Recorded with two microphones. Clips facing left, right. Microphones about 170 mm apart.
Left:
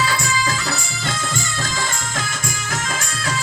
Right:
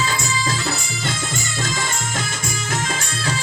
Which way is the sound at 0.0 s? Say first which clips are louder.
Left 2 dB; 25° right (ahead or behind).